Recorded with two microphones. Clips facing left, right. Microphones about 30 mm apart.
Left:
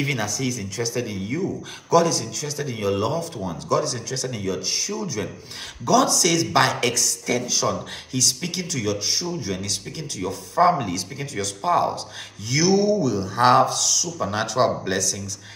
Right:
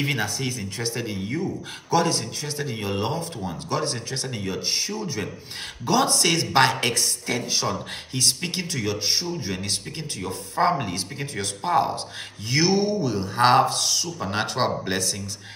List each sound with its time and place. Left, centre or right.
0.0 s speech: right
1.0 s speech: centre
2.7 s speech: centre
3.0 s speech: right
10.6 s speech: centre
12.4 s speech: right
13.4 s speech: centre